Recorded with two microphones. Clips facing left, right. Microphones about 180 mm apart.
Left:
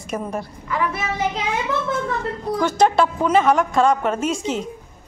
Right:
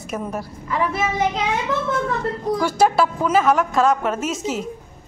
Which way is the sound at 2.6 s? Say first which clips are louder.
Left 1 dB; 10° right (ahead or behind).